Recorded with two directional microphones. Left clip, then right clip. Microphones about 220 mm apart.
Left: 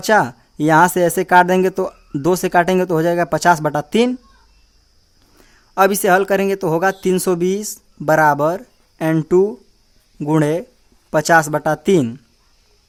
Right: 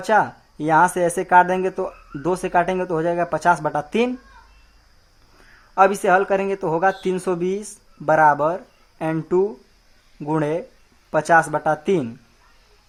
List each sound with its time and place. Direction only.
0.1 s speech: 35° left (ahead or behind)
5.7 s speech: 35° left (ahead or behind)